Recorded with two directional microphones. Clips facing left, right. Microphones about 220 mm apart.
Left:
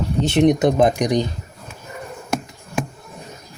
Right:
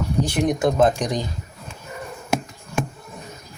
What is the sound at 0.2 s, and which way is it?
Speech, 25° left (ahead or behind).